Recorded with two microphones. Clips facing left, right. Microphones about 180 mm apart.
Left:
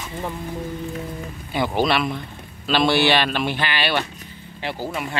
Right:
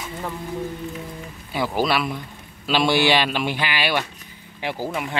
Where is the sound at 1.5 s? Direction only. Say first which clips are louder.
Left 1 dB; centre (ahead or behind).